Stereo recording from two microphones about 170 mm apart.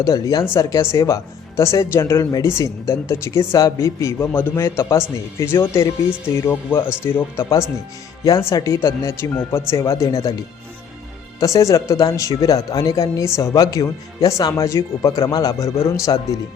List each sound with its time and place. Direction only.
0.0 s speech: 20° left (ahead or behind)
11.3 s speech: 20° left (ahead or behind)